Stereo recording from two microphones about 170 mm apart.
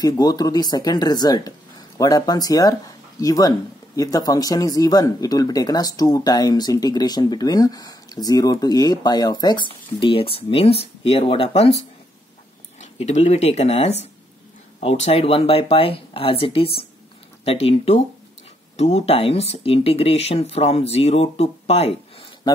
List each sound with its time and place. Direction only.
0.0 s speech: 25° left (ahead or behind)
12.8 s speech: 40° left (ahead or behind)